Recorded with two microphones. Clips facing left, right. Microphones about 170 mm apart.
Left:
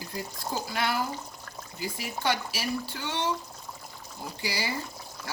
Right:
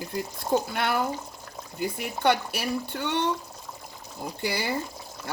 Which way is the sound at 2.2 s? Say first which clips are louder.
Right 5 dB; 60° right (ahead or behind).